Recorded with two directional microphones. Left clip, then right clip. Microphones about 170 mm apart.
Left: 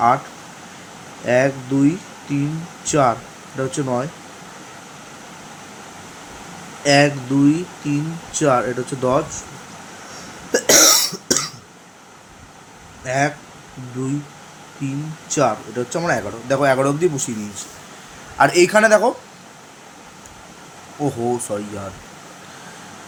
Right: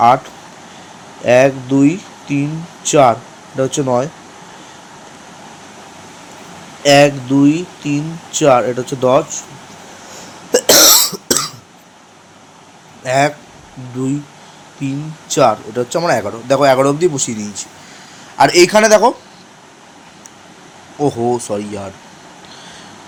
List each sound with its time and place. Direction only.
1.2 s speech: 35° right (ahead or behind)
6.8 s speech: 30° right (ahead or behind)
10.5 s cough: 25° right (ahead or behind)
13.1 s speech: 30° right (ahead or behind)
14.8 s speech: 30° right (ahead or behind)
21.0 s speech: 20° right (ahead or behind)